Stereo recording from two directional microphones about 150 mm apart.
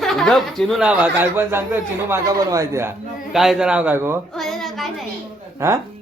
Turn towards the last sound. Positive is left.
turn(degrees=-20)  # may be behind; listen again after turning